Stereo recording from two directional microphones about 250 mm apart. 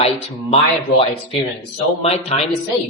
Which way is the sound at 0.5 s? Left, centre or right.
Left.